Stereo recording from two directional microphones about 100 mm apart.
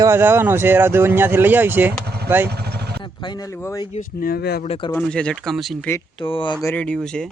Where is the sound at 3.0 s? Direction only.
45° left (ahead or behind).